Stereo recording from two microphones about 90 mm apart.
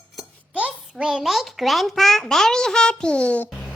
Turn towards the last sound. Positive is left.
turn(degrees=15)  # may be behind; listen again after turning